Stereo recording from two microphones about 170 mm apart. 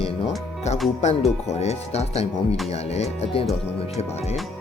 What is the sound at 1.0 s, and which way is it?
Speech, 40° left (ahead or behind).